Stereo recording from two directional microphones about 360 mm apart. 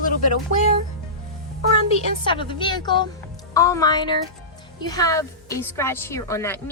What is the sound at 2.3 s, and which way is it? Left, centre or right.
A woman's voice, centre.